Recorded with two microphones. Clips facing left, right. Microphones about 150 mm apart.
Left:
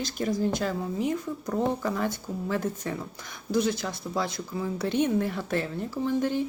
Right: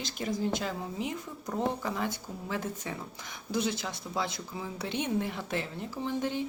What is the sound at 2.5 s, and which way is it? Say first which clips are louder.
Speech: left 5 dB; 45° left (ahead or behind).